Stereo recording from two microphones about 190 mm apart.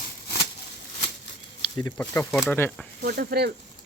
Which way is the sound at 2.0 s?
15° left (ahead or behind).